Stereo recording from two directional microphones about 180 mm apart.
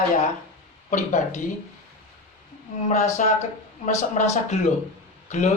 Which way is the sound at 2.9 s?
45° left (ahead or behind).